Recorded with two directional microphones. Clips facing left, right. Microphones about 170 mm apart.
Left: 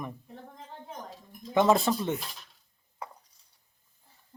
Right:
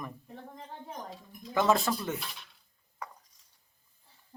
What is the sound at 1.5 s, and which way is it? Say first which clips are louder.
Speech: left 3 dB; 20° left (ahead or behind).